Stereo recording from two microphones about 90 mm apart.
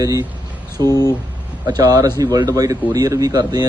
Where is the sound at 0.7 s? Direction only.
30° left (ahead or behind).